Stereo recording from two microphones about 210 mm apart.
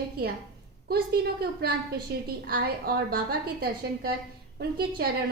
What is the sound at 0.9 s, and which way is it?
A woman's voice, 45° right (ahead or behind).